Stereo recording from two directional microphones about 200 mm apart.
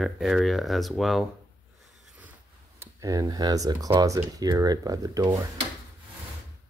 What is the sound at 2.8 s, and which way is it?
Speech, 15° right (ahead or behind).